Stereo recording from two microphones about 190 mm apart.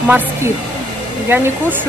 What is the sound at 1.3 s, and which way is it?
Speech, 10° right (ahead or behind).